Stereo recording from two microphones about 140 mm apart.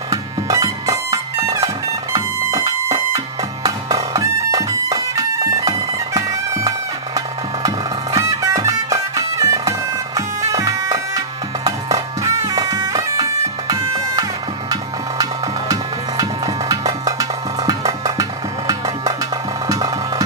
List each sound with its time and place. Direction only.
0.1 s bagpipes: 25° right (ahead or behind)
2.1 s music: 25° right (ahead or behind)
6.1 s bagpipes: 20° right (ahead or behind)
8.1 s music: 25° right (ahead or behind)
10.2 s bagpipes: 25° right (ahead or behind)
11.6 s music: 25° right (ahead or behind)
17.1 s music: 25° right (ahead or behind)
19.6 s music: 25° right (ahead or behind)